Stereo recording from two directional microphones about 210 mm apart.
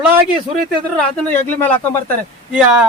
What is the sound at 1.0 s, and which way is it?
Speech, 5° left (ahead or behind).